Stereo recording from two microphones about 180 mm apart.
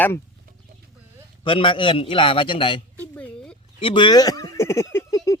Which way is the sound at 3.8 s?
30° left (ahead or behind).